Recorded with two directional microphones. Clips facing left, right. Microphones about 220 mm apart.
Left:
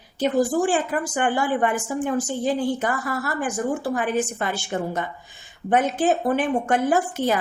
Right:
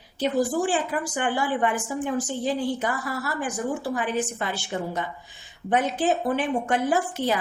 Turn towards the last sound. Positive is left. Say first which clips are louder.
# left 3 dB
turn(degrees=50)  # may be behind; listen again after turning